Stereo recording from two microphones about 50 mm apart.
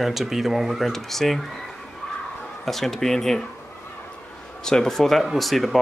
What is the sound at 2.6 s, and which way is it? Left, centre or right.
Speech, centre.